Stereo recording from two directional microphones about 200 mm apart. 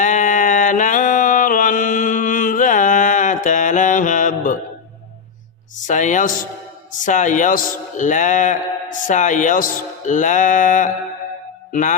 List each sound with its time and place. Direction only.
0.0 s mantra: 40° left (ahead or behind)
5.8 s speech: 40° left (ahead or behind)